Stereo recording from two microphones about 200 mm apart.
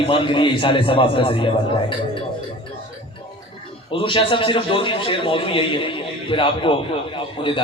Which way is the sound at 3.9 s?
25° left (ahead or behind).